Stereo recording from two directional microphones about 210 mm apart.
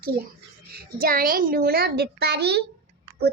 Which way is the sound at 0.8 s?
45° right (ahead or behind).